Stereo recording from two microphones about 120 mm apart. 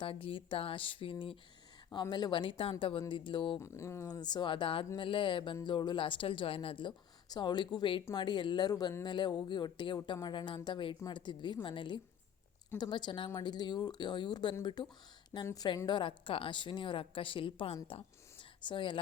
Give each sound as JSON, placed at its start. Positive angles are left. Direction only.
{"t": 0.0, "sound": "speech", "side_deg": 50}
{"t": 3.6, "sound": "a woman's voice", "side_deg": 25}